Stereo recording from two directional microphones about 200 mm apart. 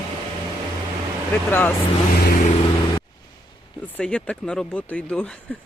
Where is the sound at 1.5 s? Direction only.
10° left (ahead or behind).